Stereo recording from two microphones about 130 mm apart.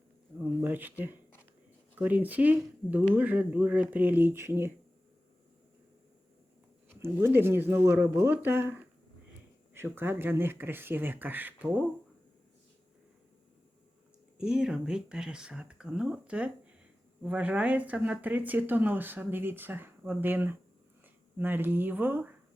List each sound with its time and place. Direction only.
0.3 s speech: 15° right (ahead or behind)
7.0 s speech: 20° right (ahead or behind)
14.3 s speech: 5° right (ahead or behind)